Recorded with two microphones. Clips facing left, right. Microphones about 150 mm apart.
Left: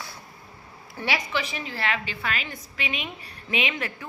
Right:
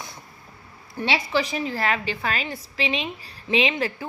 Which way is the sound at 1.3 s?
35° right (ahead or behind).